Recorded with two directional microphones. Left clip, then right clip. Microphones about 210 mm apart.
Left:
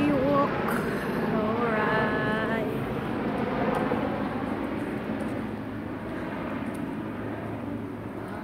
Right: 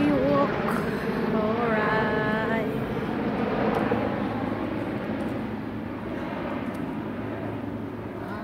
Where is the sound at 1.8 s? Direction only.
10° right (ahead or behind).